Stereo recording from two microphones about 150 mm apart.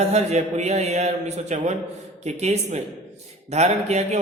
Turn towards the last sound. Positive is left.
turn(degrees=-45)  # may be behind; listen again after turning